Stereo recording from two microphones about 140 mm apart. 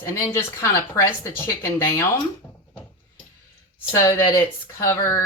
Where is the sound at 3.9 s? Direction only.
20° left (ahead or behind).